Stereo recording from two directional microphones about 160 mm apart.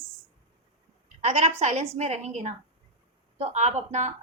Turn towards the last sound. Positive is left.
turn(degrees=-45)  # may be behind; listen again after turning